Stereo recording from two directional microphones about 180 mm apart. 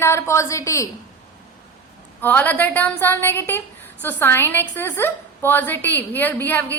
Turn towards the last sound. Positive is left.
turn(degrees=10)  # may be behind; listen again after turning